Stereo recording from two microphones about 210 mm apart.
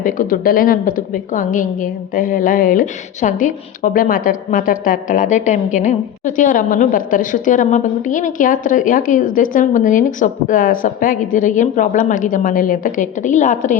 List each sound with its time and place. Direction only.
0.0 s a woman's voice: 40° left (ahead or behind)